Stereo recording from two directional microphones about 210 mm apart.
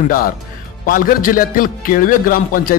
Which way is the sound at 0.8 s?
40° left (ahead or behind).